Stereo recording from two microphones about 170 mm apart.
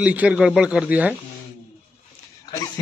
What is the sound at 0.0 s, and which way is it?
A man's voice, 10° right (ahead or behind).